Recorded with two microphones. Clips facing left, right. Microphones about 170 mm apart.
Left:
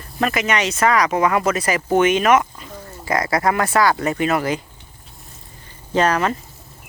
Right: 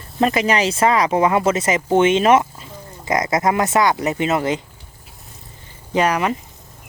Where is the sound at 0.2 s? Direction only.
30° right (ahead or behind).